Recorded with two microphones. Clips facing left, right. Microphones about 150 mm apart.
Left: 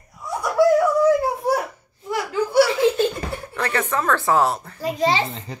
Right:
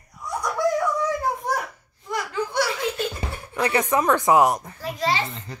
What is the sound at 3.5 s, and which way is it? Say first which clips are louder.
Speech: right 3 dB; 15° right (ahead or behind).